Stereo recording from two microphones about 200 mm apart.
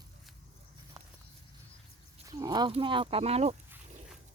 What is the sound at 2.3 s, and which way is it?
Speech, 15° right (ahead or behind).